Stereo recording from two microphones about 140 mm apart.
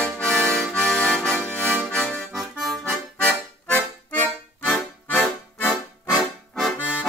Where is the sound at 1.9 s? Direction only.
5° left (ahead or behind).